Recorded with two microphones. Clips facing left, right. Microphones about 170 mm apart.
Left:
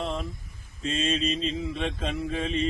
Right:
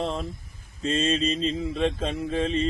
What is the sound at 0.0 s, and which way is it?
Mantra, 35° right (ahead or behind).